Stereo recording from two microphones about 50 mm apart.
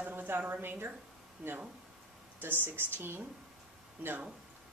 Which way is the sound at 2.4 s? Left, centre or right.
Right.